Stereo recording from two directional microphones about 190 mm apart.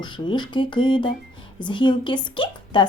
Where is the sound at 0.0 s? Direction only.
25° left (ahead or behind).